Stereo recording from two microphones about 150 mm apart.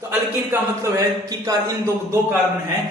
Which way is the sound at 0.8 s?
25° right (ahead or behind).